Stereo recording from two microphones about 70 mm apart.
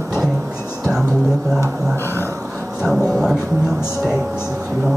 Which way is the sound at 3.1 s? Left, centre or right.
Centre.